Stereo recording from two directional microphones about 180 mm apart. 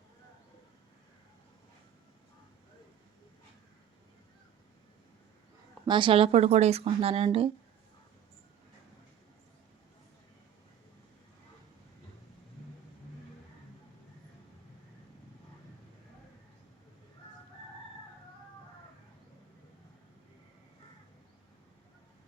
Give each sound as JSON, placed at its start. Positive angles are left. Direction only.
{"t": 5.8, "sound": "speech", "side_deg": -25}